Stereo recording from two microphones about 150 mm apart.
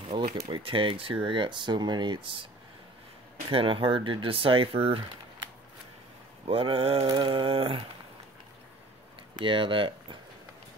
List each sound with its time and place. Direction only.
0.5 s speech: 35° right (ahead or behind)
3.4 s speech: 35° right (ahead or behind)
6.4 s speech: 40° right (ahead or behind)
9.3 s speech: 35° right (ahead or behind)